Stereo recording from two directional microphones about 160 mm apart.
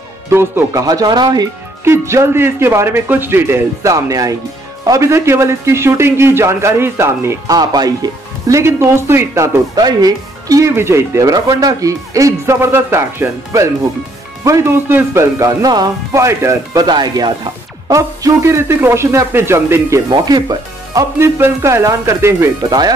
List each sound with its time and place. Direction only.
0.3 s a man's voice: 15° right (ahead or behind)